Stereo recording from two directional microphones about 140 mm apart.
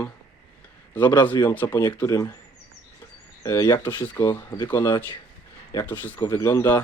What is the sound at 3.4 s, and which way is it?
Speech, 20° left (ahead or behind).